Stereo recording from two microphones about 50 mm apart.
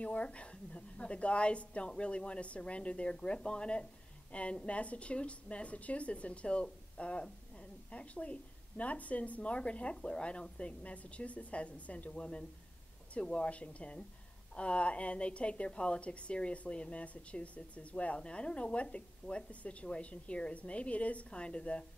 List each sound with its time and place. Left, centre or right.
0.0 s a woman's voice: left